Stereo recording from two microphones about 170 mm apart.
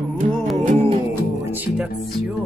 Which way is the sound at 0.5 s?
40° right (ahead or behind).